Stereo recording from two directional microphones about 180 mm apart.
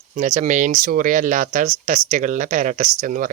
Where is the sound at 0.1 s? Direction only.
45° right (ahead or behind).